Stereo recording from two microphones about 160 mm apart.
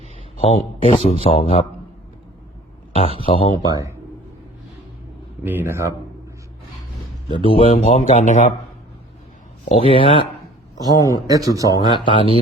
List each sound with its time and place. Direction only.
0.3 s speech: 40° left (ahead or behind)
3.2 s speech: 30° left (ahead or behind)
3.7 s a man's voice: 20° right (ahead or behind)
5.4 s speech: 10° right (ahead or behind)
7.3 s speech: 35° left (ahead or behind); by 8.5 s 50° left (ahead or behind)
9.6 s speech: 35° left (ahead or behind)
10.8 s a man's voice: 25° left (ahead or behind)
11.3 s a man's voice: 20° right (ahead or behind)
11.9 s speech: 30° left (ahead or behind)